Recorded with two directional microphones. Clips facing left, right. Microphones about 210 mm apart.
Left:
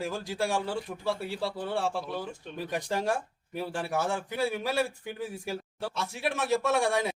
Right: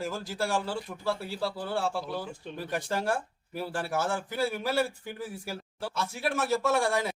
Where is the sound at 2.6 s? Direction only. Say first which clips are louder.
Left 1 dB; 15° left (ahead or behind).